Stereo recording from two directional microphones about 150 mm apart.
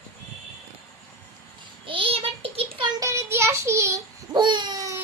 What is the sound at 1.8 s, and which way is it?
A child's voice, 35° right (ahead or behind).